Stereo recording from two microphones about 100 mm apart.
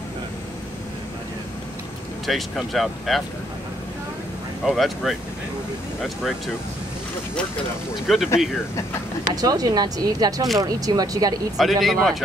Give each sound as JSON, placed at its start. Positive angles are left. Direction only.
{"t": 2.2, "sound": "speech", "side_deg": 0}
{"t": 4.6, "sound": "speech", "side_deg": 0}
{"t": 7.9, "sound": "speech", "side_deg": -5}
{"t": 9.3, "sound": "speech", "side_deg": -40}
{"t": 11.5, "sound": "speech", "side_deg": 0}